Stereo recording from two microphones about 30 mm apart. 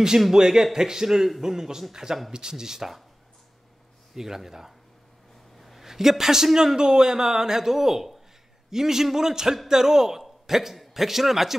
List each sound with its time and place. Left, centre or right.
0.3 s a woman's voice: centre
4.1 s a woman's voice: centre
5.6 s a sound: centre
5.9 s a woman's voice: centre